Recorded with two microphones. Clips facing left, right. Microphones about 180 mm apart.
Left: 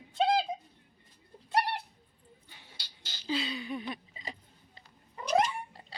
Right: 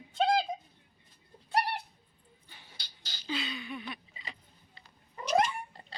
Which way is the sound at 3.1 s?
30° left (ahead or behind).